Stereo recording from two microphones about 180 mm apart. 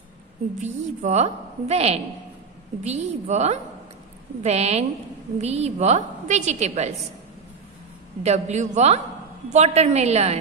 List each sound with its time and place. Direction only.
0.6 s a woman's voice: 40° right (ahead or behind)
8.2 s a woman's voice: 40° right (ahead or behind)